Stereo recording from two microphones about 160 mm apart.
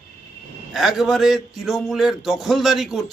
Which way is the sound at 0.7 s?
Centre (ahead or behind).